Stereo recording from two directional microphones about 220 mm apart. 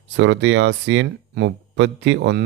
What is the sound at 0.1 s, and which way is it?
Speech, 55° right (ahead or behind).